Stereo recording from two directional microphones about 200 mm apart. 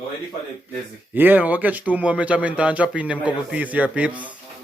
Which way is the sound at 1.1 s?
10° right (ahead or behind).